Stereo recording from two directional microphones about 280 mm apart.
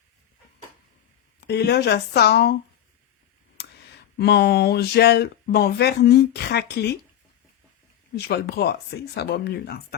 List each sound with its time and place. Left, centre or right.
1.4 s speech: left
3.6 s a sound: left
4.2 s speech: left
8.1 s speech: left